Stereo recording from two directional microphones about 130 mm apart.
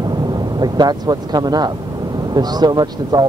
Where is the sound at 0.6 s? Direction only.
30° right (ahead or behind).